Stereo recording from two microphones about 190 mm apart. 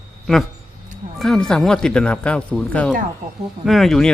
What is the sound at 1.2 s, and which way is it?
Speech, 5° left (ahead or behind).